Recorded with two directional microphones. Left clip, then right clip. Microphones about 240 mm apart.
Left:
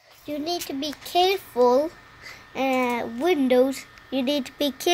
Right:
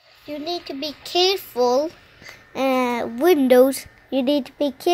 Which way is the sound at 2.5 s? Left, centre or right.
Centre.